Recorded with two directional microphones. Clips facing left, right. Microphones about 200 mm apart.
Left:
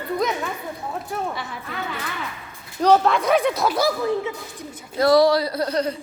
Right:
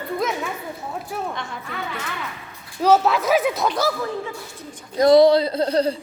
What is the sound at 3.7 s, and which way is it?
Speech, 15° left (ahead or behind).